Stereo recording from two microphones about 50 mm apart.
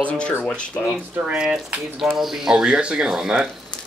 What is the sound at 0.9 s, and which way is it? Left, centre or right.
Speech, right.